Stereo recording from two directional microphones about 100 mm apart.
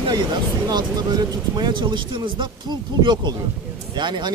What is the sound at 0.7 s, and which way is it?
Speech, 45° right (ahead or behind).